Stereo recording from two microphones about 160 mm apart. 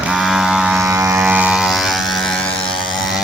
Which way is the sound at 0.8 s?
20° right (ahead or behind).